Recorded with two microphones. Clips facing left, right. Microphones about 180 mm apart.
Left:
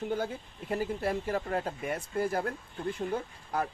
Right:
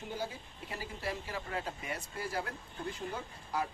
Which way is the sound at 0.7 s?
55° left (ahead or behind).